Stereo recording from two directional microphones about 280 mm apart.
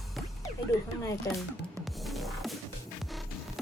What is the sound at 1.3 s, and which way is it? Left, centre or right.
Speech, centre.